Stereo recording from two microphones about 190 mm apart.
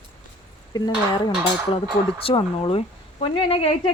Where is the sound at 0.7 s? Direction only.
20° left (ahead or behind).